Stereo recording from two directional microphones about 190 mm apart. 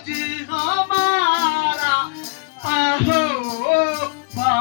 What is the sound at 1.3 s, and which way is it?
Music, 60° left (ahead or behind).